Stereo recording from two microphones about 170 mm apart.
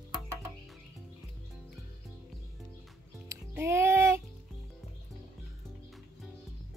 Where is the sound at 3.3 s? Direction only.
15° right (ahead or behind).